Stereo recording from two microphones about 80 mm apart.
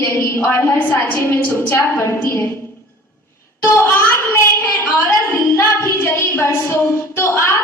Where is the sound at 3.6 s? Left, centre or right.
Left.